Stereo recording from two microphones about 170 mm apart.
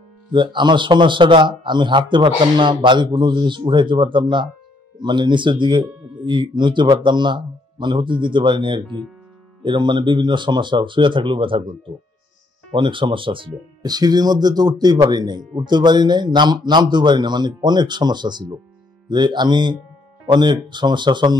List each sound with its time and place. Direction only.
0.3 s a man's voice: 30° right (ahead or behind)
12.7 s a man's voice: 30° right (ahead or behind)